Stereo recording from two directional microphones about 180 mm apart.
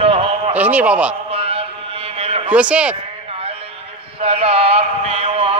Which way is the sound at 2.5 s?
5° right (ahead or behind).